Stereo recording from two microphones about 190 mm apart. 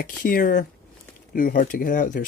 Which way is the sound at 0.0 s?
50° left (ahead or behind).